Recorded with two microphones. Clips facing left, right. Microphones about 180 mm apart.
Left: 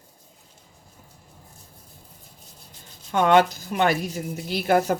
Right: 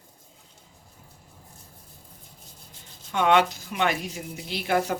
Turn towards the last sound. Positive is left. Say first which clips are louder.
# left 4 dB
turn(degrees=45)  # may be behind; listen again after turning